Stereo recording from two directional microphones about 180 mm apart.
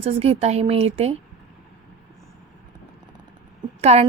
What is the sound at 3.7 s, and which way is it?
Speech, 35° right (ahead or behind).